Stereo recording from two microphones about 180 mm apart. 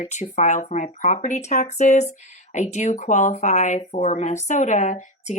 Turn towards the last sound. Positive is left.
turn(degrees=40)  # may be behind; listen again after turning